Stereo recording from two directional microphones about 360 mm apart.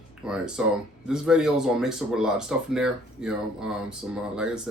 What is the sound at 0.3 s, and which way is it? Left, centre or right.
Speech, centre.